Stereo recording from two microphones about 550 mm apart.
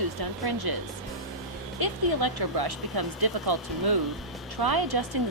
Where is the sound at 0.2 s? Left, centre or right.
Right.